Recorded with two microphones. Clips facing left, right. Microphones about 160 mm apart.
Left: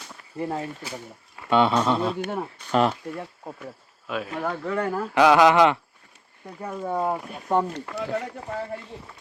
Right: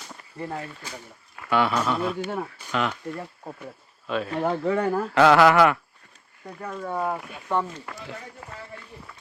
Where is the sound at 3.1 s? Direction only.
Centre (ahead or behind).